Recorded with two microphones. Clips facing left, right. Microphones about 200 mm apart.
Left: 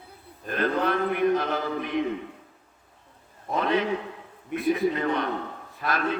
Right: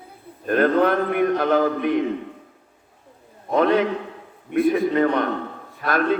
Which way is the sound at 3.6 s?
50° right (ahead or behind).